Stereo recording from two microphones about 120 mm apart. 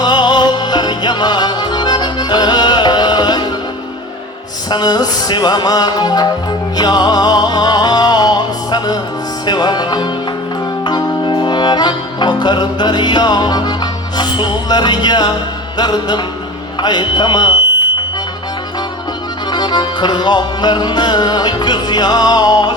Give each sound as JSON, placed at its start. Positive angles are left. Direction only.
{"t": 0.0, "sound": "music", "side_deg": 40}
{"t": 4.7, "sound": "music", "side_deg": 35}
{"t": 19.5, "sound": "music", "side_deg": 35}